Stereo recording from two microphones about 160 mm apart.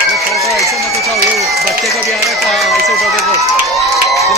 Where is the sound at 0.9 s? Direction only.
Centre (ahead or behind).